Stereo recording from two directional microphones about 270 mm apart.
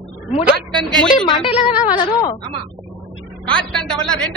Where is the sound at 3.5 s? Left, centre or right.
Centre.